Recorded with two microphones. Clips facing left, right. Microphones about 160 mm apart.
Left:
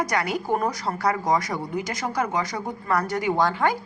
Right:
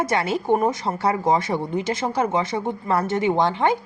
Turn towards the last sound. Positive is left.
turn(degrees=-25)  # may be behind; listen again after turning